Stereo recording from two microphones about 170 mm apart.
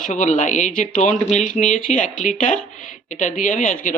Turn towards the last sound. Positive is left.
turn(degrees=50)  # may be behind; listen again after turning